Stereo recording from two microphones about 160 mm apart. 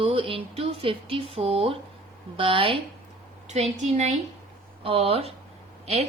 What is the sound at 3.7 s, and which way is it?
Speech, 45° right (ahead or behind).